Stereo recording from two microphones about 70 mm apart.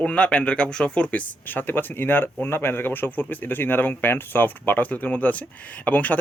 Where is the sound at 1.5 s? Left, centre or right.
Left.